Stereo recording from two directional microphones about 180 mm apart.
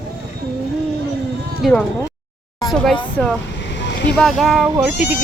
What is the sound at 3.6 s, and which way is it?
Vehicle, 75° left (ahead or behind).